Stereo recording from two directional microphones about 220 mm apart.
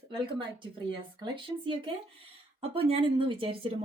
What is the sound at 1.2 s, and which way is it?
Speech, 20° right (ahead or behind).